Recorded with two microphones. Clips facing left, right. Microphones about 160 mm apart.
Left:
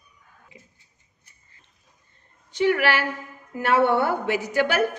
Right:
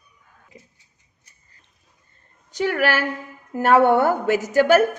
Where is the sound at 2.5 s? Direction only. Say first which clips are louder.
Even; 40° right (ahead or behind).